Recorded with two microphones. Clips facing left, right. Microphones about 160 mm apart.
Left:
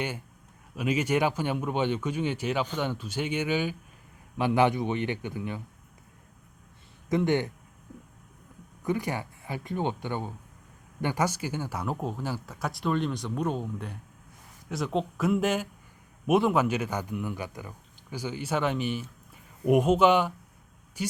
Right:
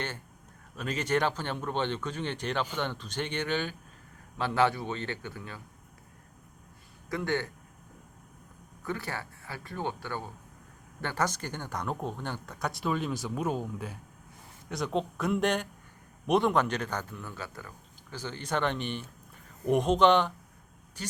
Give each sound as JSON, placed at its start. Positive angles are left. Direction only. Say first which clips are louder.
{"t": 0.8, "sound": "a man's voice", "louder": "left 3 dB", "side_deg": 10}
{"t": 7.1, "sound": "speech", "louder": "left 6 dB", "side_deg": 20}
{"t": 8.8, "sound": "a man's voice", "louder": "left 6 dB", "side_deg": 15}